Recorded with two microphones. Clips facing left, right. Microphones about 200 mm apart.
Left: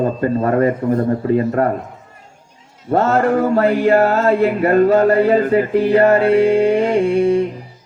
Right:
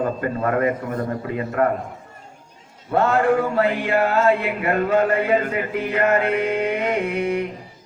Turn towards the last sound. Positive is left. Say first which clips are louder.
# left 8 dB
turn(degrees=30)  # may be behind; listen again after turning